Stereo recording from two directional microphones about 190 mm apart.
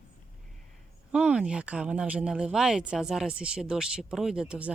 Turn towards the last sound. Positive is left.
turn(degrees=-5)  # may be behind; listen again after turning